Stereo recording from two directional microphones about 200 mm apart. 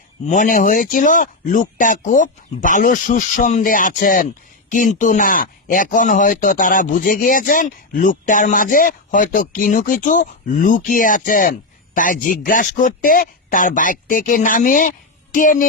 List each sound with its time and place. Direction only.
0.3 s speech: 40° left (ahead or behind)